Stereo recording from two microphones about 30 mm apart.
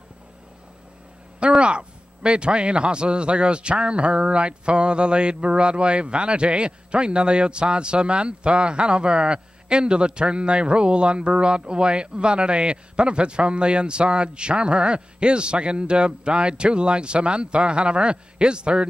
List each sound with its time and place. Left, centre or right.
1.6 s a man's voice: right